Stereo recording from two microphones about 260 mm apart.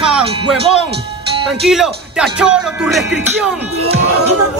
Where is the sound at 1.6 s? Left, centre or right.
Centre.